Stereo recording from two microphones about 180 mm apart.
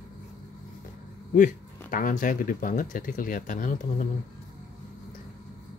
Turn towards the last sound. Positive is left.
turn(degrees=45)  # may be behind; listen again after turning